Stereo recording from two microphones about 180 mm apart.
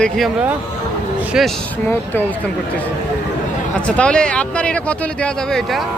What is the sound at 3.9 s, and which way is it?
Speech, 5° left (ahead or behind).